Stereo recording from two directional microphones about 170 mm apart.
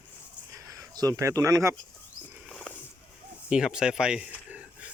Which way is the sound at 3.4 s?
5° right (ahead or behind).